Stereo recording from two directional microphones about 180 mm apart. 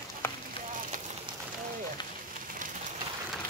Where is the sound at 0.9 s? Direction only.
45° right (ahead or behind).